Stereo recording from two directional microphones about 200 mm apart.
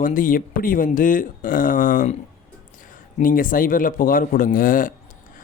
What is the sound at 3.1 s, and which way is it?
Speech, 45° left (ahead or behind).